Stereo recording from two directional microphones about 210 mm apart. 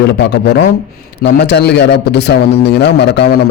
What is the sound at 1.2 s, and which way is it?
A man's voice, 55° left (ahead or behind).